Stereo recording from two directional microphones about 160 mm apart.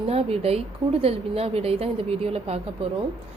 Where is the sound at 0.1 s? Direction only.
40° right (ahead or behind).